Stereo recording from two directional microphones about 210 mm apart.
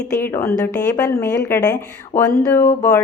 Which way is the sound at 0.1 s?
10° left (ahead or behind).